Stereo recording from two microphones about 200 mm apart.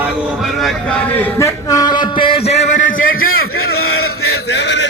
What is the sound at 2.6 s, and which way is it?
Speech, 35° left (ahead or behind).